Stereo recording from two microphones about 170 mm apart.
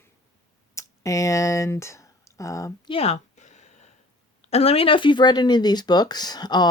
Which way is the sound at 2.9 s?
40° left (ahead or behind).